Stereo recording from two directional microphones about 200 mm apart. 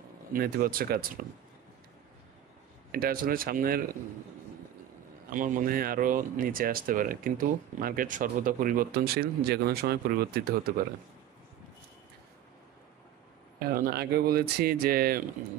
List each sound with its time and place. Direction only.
0.3 s speech: 45° right (ahead or behind)
2.9 s speech: 45° right (ahead or behind)
5.3 s speech: 40° right (ahead or behind)
13.7 s speech: 50° right (ahead or behind)